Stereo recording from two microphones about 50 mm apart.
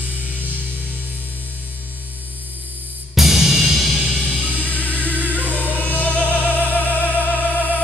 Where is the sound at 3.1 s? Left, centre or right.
Centre.